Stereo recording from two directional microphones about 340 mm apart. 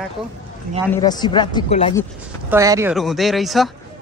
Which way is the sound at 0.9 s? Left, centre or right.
Centre.